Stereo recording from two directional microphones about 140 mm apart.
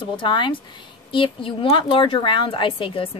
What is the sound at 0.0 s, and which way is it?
A woman's voice, 35° left (ahead or behind).